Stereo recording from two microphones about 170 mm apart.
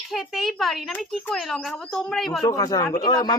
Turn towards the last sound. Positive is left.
turn(degrees=20)  # may be behind; listen again after turning